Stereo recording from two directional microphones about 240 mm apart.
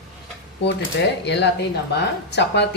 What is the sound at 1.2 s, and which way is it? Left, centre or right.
A woman's voice, left.